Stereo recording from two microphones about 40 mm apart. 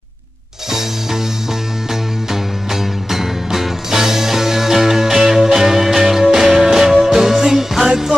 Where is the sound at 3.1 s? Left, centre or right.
Centre.